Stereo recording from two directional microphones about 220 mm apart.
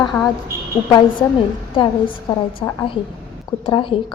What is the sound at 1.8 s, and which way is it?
A woman's voice, 20° left (ahead or behind).